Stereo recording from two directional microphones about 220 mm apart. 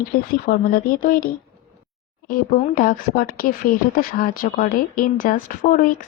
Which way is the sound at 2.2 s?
40° left (ahead or behind).